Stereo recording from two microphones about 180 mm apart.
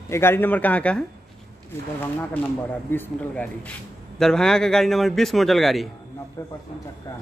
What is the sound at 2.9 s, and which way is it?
A man's voice, 10° left (ahead or behind).